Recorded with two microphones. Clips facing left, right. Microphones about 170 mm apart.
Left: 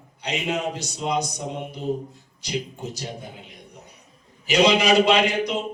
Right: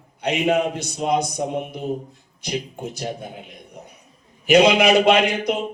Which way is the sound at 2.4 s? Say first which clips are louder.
Right 2 dB; 55° right (ahead or behind).